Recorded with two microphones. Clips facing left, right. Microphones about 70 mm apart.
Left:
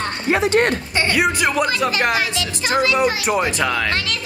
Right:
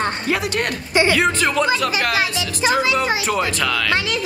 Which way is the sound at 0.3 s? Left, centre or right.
Left.